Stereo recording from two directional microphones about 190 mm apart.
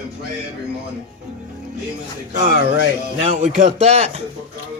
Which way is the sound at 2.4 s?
50° right (ahead or behind).